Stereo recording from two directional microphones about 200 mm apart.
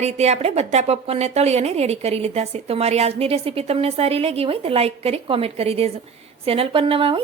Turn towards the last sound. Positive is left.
turn(degrees=-25)  # may be behind; listen again after turning